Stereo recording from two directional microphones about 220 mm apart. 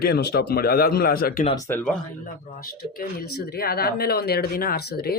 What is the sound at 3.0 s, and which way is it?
Speech, 45° left (ahead or behind).